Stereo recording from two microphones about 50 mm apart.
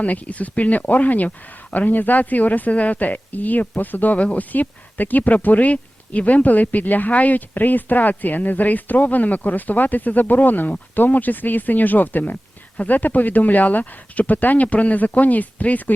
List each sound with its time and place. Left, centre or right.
0.0 s a woman's voice: left